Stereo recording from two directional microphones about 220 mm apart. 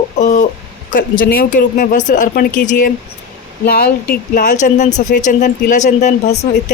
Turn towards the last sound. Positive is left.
turn(degrees=30)  # may be behind; listen again after turning